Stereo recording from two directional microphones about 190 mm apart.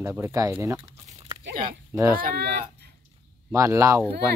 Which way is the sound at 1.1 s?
30° right (ahead or behind).